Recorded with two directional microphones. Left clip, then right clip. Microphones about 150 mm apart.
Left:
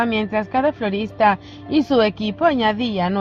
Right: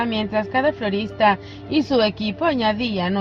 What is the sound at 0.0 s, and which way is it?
Speech, 45° left (ahead or behind).